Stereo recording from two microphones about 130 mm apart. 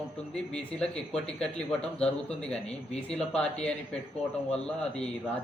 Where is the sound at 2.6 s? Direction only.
55° left (ahead or behind).